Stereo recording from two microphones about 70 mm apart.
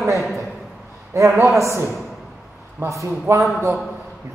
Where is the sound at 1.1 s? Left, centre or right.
Right.